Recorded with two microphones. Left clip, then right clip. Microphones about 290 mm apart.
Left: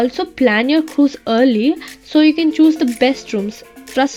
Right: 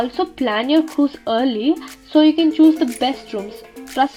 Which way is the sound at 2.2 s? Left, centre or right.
Left.